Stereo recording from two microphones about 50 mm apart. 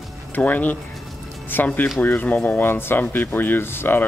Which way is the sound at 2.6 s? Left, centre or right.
Left.